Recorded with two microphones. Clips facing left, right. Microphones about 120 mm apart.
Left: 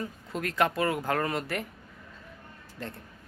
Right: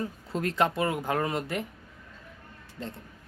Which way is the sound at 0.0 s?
25° right (ahead or behind).